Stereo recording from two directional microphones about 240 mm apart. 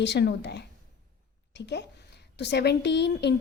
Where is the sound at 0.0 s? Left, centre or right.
Left.